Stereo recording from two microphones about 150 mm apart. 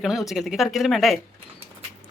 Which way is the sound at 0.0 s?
Centre (ahead or behind).